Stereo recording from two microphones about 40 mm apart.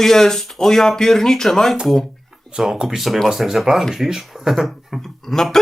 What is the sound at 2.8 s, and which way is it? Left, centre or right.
Speech, centre.